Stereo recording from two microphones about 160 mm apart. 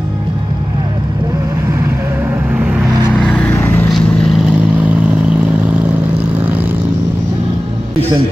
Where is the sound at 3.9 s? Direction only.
5° left (ahead or behind).